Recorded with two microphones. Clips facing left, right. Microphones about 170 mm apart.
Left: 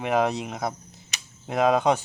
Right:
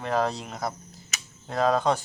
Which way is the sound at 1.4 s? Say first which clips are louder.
Left 2 dB; 20° left (ahead or behind).